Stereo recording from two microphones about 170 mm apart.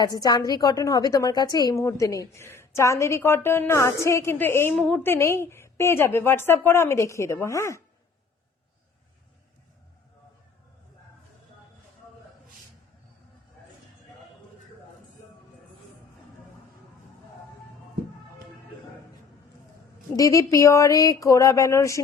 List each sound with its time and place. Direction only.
0.0 s a woman's voice: 20° left (ahead or behind)
20.1 s speech: 20° left (ahead or behind)